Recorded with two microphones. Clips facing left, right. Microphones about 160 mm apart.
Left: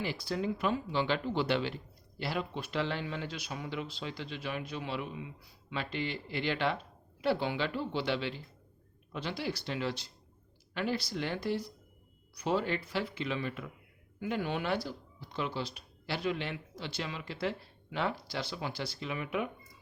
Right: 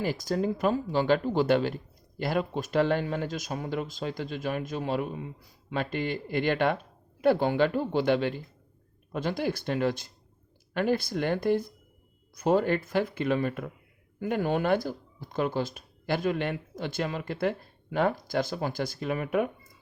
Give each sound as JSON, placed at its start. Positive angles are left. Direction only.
{"t": 0.0, "sound": "speech", "side_deg": -45}